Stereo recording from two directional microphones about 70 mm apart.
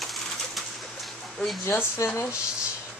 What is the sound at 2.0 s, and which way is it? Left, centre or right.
Speech, left.